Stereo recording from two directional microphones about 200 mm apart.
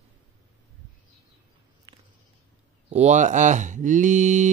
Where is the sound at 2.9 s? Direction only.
35° right (ahead or behind).